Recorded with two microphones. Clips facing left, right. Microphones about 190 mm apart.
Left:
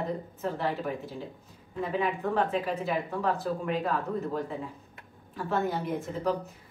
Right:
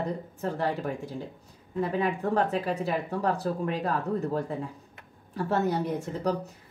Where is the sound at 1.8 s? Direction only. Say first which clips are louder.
Right 2 dB; 40° right (ahead or behind).